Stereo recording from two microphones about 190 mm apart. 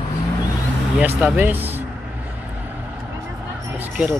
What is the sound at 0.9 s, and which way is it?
Speech, 5° right (ahead or behind).